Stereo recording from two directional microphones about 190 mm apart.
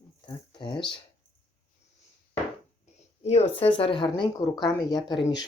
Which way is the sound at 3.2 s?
35° left (ahead or behind).